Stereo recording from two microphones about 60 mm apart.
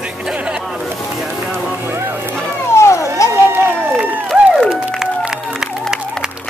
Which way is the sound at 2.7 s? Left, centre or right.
Left.